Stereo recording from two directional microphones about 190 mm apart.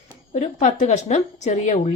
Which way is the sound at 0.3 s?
40° left (ahead or behind).